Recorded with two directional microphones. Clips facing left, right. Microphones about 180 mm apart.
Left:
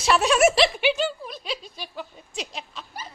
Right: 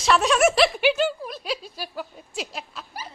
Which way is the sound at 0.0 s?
5° left (ahead or behind).